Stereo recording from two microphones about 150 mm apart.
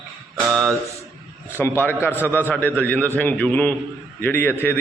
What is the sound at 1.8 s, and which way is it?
A man's voice, 15° left (ahead or behind).